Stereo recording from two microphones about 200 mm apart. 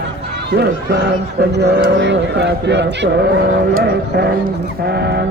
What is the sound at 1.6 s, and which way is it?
Speech, 60° right (ahead or behind).